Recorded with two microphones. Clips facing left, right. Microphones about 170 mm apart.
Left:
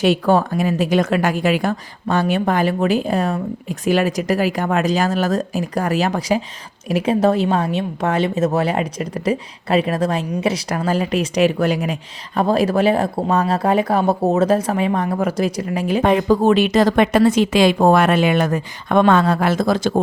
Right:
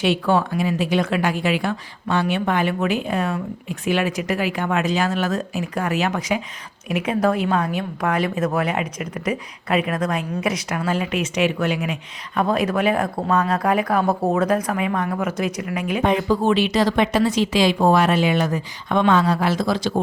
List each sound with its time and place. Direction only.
0.0 s a woman's voice: 40° left (ahead or behind)
16.3 s speech: 45° left (ahead or behind)